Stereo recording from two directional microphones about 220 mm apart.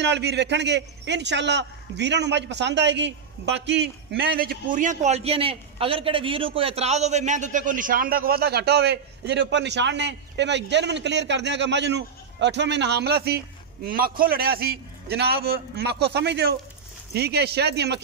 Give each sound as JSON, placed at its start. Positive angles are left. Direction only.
{"t": 0.0, "sound": "a man's voice", "side_deg": -50}